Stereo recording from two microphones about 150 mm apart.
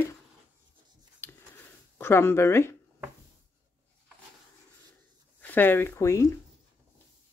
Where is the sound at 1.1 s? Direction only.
15° left (ahead or behind).